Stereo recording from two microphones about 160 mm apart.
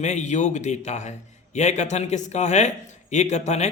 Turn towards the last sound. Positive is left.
turn(degrees=45)  # may be behind; listen again after turning